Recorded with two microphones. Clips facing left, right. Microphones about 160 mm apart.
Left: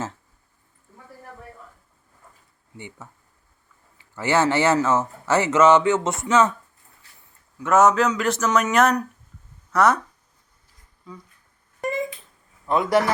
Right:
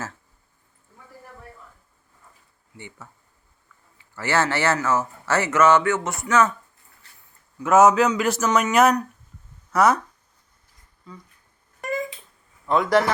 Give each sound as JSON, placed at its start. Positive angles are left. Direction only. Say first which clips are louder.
{"t": 2.7, "sound": "speech", "louder": "left 2 dB", "side_deg": 20}
{"t": 4.1, "sound": "speech", "louder": "left 3 dB", "side_deg": 15}
{"t": 7.6, "sound": "speech", "louder": "right 2 dB", "side_deg": -5}
{"t": 11.8, "sound": "a sound", "louder": "left 2 dB", "side_deg": 20}
{"t": 12.6, "sound": "a man's voice", "louder": "right 1 dB", "side_deg": 5}